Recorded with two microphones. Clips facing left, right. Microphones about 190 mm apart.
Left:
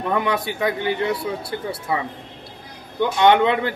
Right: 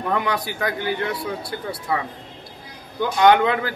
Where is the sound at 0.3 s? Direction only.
25° left (ahead or behind).